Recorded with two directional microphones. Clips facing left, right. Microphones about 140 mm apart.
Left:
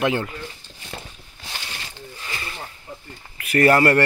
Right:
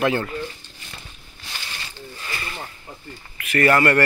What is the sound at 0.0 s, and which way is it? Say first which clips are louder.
Speech: right 1 dB; 15° left (ahead or behind).